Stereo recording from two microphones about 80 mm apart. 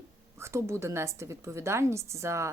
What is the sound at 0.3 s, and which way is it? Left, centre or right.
A woman's voice, right.